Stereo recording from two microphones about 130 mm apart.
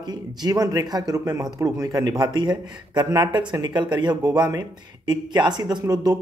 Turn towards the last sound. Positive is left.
turn(degrees=-25)  # may be behind; listen again after turning